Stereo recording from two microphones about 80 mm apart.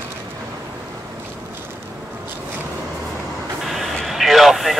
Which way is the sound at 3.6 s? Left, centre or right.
Centre.